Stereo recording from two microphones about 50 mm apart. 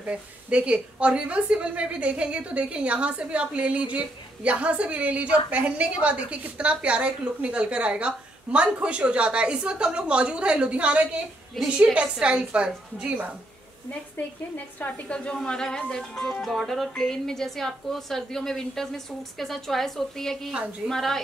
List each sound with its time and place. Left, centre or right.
0.0 s a woman's voice: right
15.0 s a woman's voice: left
16.4 s speech: centre
16.9 s a woman's voice: centre